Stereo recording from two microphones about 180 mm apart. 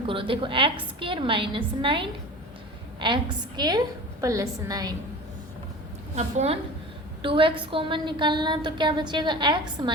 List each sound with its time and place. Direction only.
0.1 s a woman's voice: 30° right (ahead or behind)
6.1 s a woman's voice: 40° right (ahead or behind)